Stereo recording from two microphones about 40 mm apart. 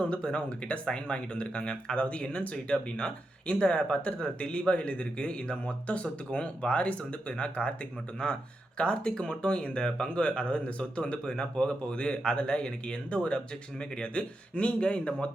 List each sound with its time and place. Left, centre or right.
0.0 s speech: left
14.5 s speech: left
14.8 s speech: left